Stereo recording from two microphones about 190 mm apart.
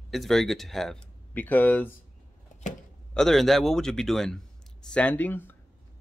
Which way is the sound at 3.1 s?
Centre (ahead or behind).